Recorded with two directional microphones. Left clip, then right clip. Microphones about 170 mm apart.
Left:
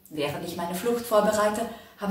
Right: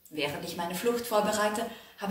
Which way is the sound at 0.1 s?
15° right (ahead or behind).